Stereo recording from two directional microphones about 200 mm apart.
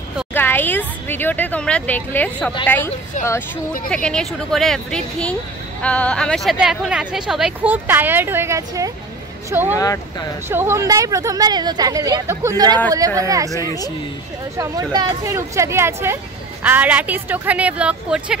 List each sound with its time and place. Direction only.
0.3 s speech: 10° left (ahead or behind)
3.9 s speech: 5° left (ahead or behind); by 13.5 s 15° right (ahead or behind)
14.6 s speech: 20° right (ahead or behind)